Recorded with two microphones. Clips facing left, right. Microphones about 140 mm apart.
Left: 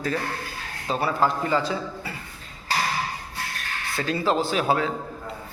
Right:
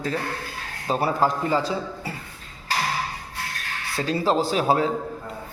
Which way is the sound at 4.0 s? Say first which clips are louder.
Right 2 dB; 35° right (ahead or behind).